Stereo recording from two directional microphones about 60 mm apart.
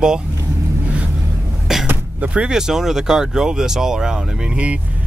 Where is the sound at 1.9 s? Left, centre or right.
Right.